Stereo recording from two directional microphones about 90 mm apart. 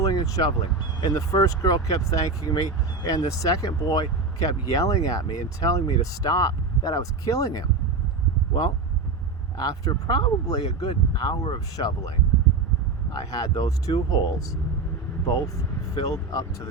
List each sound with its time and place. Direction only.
0.0 s a sound: 45° left (ahead or behind)
1.0 s speech: 40° left (ahead or behind)
9.6 s speech: 45° left (ahead or behind)
13.1 s speech: 40° left (ahead or behind)